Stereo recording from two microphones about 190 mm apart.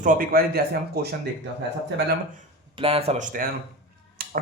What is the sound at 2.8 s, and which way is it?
Speech, 30° right (ahead or behind).